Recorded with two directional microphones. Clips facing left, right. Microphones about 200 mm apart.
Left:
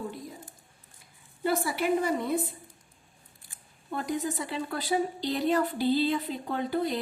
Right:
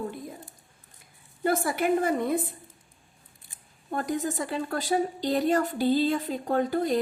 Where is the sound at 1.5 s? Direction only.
50° right (ahead or behind).